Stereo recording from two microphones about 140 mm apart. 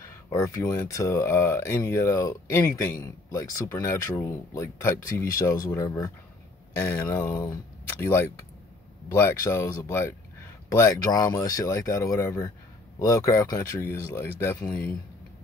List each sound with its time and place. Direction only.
0.3 s speech: 25° left (ahead or behind)